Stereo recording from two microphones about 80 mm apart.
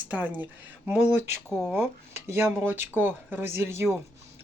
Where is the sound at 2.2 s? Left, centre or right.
Right.